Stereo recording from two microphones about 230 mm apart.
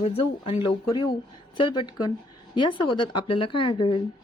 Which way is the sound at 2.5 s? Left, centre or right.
Left.